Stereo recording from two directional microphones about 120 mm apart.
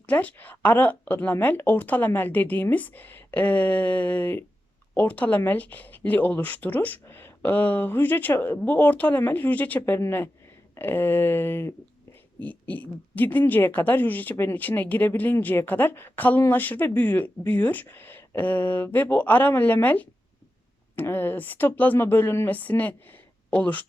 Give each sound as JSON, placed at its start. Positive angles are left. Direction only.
{"t": 0.0, "sound": "speech", "side_deg": 10}